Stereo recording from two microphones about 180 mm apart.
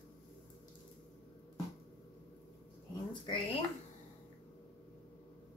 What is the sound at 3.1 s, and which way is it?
Speech, 25° left (ahead or behind).